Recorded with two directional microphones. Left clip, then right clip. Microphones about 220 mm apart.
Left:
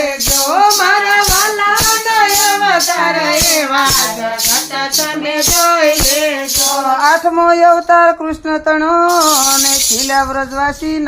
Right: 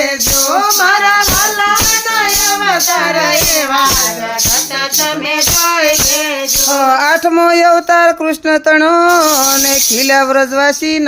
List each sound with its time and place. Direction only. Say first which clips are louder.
6.9 s speech: right 1 dB; 40° right (ahead or behind)